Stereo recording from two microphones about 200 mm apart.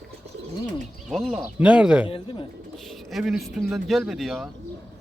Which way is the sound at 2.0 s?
25° left (ahead or behind).